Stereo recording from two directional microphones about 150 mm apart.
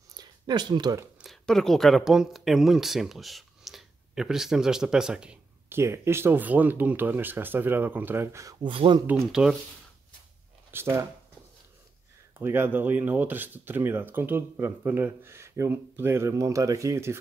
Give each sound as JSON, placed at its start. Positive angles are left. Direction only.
{"t": 0.1, "sound": "a sound", "side_deg": -30}
{"t": 1.2, "sound": "speech", "side_deg": 0}
{"t": 8.6, "sound": "speech", "side_deg": -35}
{"t": 9.2, "sound": "speech", "side_deg": -5}
{"t": 10.7, "sound": "speech", "side_deg": -15}
{"t": 12.4, "sound": "speech", "side_deg": -15}